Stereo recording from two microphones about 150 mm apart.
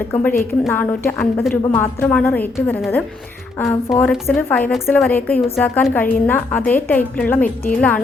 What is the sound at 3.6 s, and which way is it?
A woman's voice, 10° left (ahead or behind).